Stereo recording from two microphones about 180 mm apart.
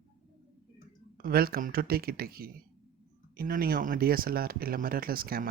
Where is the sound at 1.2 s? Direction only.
55° right (ahead or behind).